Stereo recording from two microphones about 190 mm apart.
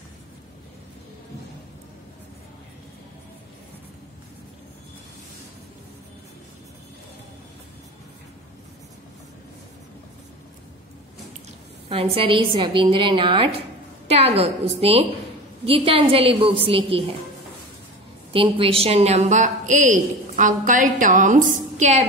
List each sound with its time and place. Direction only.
11.9 s a woman's voice: 30° right (ahead or behind)
18.3 s a woman's voice: 30° right (ahead or behind)